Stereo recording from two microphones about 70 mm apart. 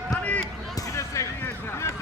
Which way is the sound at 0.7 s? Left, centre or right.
Left.